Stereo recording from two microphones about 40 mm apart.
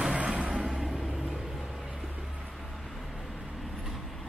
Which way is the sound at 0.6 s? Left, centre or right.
Centre.